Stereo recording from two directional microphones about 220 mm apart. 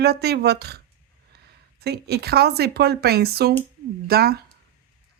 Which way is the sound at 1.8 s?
45° right (ahead or behind).